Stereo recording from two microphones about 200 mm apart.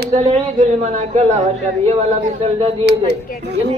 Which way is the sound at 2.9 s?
60° right (ahead or behind).